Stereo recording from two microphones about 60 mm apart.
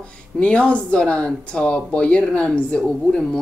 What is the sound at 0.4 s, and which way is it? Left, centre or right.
Speech, centre.